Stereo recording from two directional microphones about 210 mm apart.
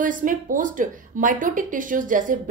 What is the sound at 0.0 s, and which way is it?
Speech, 40° right (ahead or behind).